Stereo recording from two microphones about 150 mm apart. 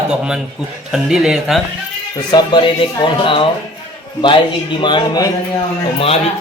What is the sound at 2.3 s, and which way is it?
Speech, 30° left (ahead or behind).